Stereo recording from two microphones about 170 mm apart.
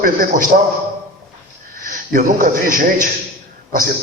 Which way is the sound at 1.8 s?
55° right (ahead or behind).